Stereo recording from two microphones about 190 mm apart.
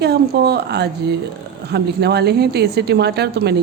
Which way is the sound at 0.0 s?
60° right (ahead or behind).